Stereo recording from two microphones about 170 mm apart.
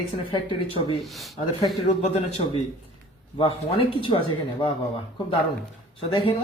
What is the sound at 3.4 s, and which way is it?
Speech, 30° left (ahead or behind).